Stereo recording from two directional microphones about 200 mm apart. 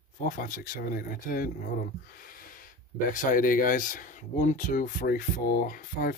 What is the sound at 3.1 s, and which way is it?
Speech, 40° left (ahead or behind).